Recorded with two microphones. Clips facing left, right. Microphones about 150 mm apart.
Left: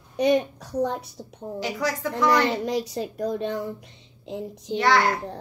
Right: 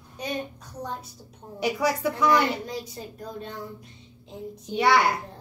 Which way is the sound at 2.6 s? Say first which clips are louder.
Left 8 dB; 85° left.